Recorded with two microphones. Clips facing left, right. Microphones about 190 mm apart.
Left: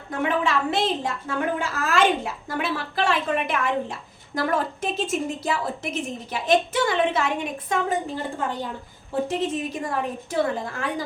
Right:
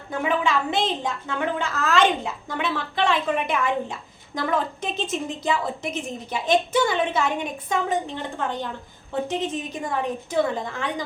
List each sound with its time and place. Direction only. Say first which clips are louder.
0.2 s a woman's voice: even; centre (ahead or behind)